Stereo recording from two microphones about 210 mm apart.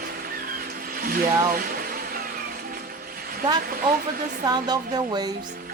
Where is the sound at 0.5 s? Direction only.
45° right (ahead or behind).